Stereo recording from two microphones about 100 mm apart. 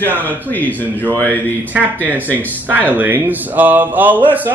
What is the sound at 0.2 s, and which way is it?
Speech, 15° left (ahead or behind).